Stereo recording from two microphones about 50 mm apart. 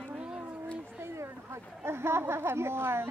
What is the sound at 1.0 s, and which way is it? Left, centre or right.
Speech, right.